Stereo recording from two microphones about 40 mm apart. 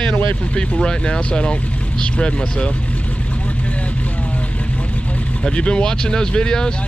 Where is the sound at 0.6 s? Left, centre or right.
Left.